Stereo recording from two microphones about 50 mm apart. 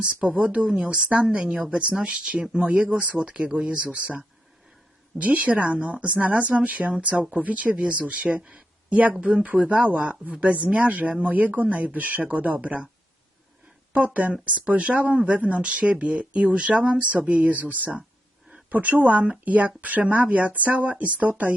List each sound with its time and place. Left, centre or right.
0.0 s a woman's voice: right
13.9 s a woman's voice: right